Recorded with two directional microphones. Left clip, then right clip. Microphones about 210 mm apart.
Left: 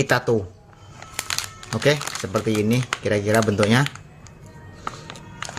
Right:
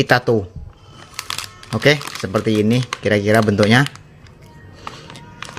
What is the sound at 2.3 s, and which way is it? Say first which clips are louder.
Speech: right 5 dB; 30° right (ahead or behind).